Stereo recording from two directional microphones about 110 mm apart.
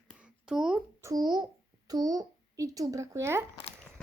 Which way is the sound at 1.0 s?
35° right (ahead or behind).